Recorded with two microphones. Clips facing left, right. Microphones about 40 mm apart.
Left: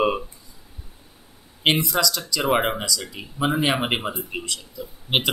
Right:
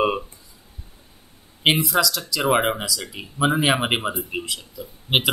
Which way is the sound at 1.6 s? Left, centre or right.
Centre.